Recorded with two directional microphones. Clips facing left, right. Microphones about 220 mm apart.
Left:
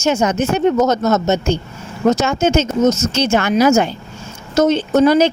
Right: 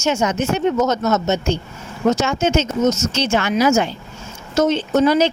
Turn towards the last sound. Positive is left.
turn(degrees=45)  # may be behind; listen again after turning